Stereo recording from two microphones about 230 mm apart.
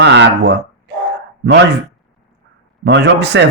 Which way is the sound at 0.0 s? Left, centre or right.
Right.